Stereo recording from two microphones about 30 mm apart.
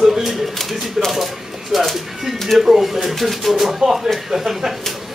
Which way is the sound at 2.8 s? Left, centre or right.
Centre.